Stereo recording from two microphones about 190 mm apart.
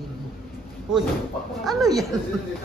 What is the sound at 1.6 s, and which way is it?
Music, centre (ahead or behind).